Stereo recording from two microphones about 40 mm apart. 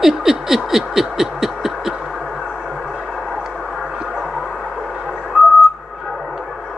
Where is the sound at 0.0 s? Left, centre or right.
Centre.